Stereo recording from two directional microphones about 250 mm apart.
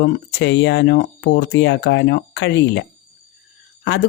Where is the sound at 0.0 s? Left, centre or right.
Left.